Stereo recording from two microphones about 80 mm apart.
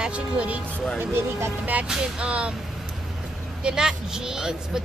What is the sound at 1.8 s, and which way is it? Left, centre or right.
Speech, centre.